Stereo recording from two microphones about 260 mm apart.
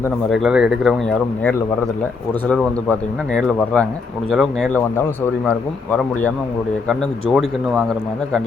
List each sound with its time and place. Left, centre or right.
0.3 s a man's voice: centre
3.3 s a man's voice: centre